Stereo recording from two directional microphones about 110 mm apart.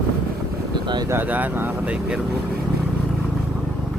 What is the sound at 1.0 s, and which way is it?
Speech, 20° right (ahead or behind).